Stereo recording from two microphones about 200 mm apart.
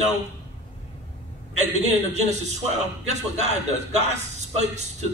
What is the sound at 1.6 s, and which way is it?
A man's voice, 35° right (ahead or behind).